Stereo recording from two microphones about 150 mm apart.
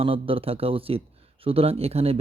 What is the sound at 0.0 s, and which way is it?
Speech, 40° right (ahead or behind).